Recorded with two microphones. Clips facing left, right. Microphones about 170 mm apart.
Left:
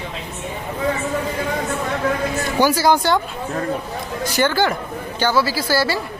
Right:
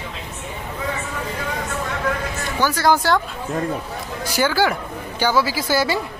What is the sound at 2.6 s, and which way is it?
Speech, 10° left (ahead or behind).